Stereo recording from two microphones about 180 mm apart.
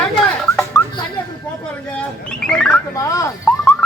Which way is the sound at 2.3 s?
5° left (ahead or behind).